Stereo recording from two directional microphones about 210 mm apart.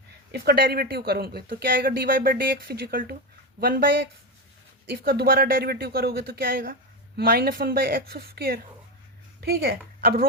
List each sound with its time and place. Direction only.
0.3 s a woman's voice: 50° right (ahead or behind)